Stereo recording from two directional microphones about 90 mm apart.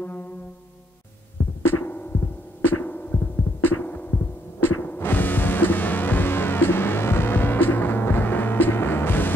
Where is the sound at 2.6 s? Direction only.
20° left (ahead or behind).